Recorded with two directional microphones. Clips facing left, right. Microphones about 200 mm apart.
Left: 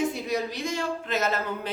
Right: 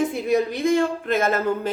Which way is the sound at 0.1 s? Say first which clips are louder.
Right 8 dB; 55° right (ahead or behind).